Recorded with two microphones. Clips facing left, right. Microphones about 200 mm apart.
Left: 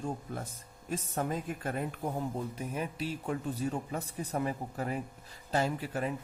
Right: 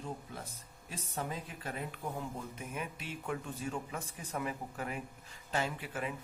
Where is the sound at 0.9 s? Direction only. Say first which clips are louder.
Left 7 dB; 50° left (ahead or behind).